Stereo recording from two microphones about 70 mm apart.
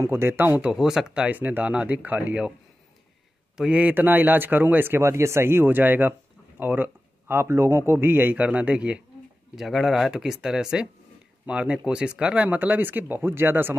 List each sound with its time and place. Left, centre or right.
0.0 s speech: right
0.6 s speech: centre
1.3 s speech: right
3.5 s speech: centre
3.9 s speech: right
9.6 s speech: centre; by 13.7 s right